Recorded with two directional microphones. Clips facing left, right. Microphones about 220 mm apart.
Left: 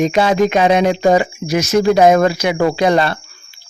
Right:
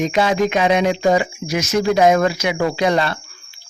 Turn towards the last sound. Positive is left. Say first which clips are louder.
# left 4 dB
turn(degrees=35)  # may be behind; listen again after turning